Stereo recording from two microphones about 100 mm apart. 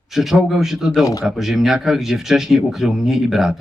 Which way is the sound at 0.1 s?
Centre (ahead or behind).